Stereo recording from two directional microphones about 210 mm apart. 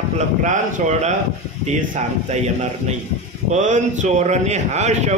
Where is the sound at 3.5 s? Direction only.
35° right (ahead or behind).